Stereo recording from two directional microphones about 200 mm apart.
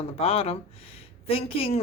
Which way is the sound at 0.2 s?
30° left (ahead or behind).